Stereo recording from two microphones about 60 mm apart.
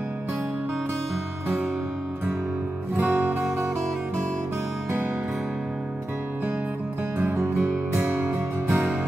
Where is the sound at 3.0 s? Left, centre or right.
Right.